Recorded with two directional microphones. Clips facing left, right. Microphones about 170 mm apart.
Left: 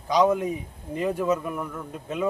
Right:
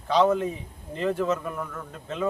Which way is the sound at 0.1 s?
10° left (ahead or behind).